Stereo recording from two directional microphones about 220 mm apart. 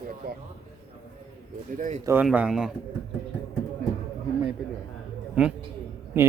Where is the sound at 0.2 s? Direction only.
45° right (ahead or behind).